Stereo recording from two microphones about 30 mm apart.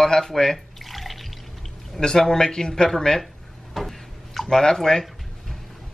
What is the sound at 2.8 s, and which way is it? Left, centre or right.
Speech, centre.